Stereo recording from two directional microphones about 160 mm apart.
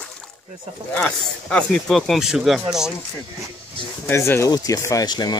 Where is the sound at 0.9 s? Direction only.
5° left (ahead or behind).